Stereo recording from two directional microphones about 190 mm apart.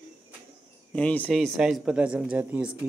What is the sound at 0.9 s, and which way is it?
Speech, 5° left (ahead or behind).